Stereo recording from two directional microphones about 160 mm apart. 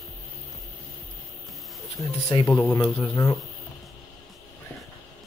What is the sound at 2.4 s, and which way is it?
Speech, 15° left (ahead or behind).